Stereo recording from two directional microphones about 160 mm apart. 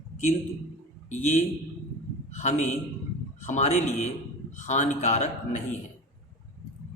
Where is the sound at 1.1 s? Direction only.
50° left (ahead or behind).